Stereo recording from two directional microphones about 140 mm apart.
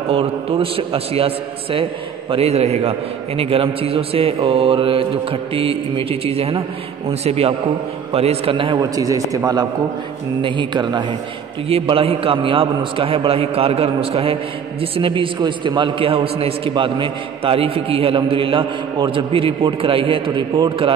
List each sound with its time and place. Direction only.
0.1 s a man's voice: 40° right (ahead or behind)
8.9 s a man's voice: 25° right (ahead or behind)